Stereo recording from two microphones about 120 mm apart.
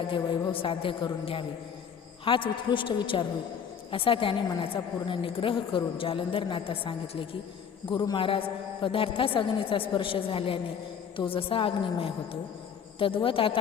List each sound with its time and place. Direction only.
0.0 s a woman's voice: 45° left (ahead or behind)